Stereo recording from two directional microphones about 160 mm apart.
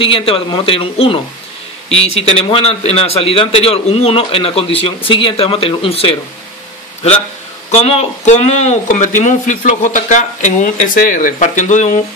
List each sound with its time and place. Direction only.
0.0 s a man's voice: 35° left (ahead or behind)
7.7 s speech: 40° left (ahead or behind)